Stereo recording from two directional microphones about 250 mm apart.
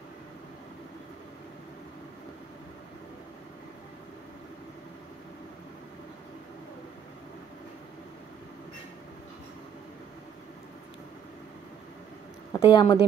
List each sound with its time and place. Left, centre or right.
12.5 s a woman's voice: centre